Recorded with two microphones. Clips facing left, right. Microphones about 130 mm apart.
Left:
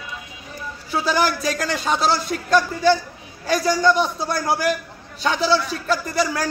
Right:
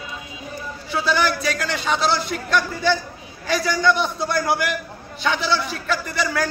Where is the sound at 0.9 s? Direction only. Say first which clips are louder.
Left 1 dB; 40° left (ahead or behind).